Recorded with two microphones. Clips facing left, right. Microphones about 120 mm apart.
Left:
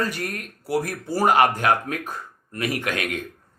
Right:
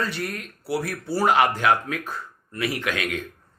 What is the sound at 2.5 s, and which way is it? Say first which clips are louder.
Speech: left 1 dB; 50° left (ahead or behind).